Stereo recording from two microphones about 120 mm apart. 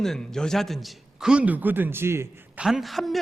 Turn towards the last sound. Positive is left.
turn(degrees=0)  # may be behind; listen again after turning